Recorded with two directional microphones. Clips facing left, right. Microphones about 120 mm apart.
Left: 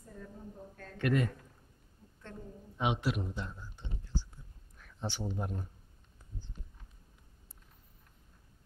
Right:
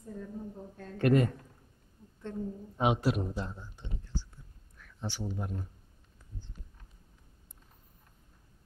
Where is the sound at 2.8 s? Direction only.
40° right (ahead or behind).